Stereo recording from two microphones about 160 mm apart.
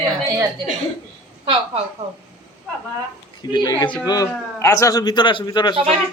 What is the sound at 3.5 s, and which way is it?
A man's voice, 25° left (ahead or behind).